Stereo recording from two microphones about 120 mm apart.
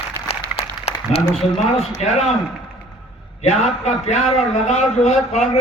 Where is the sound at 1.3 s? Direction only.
Centre (ahead or behind).